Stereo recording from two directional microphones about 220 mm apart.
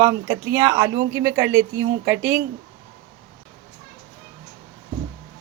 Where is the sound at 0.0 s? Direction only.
15° right (ahead or behind).